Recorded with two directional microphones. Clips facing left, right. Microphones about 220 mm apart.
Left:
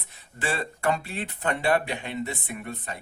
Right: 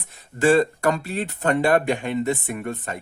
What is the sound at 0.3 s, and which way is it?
Speech, 45° right (ahead or behind).